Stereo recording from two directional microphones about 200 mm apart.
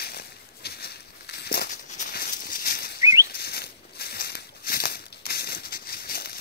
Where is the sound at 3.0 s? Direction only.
15° right (ahead or behind).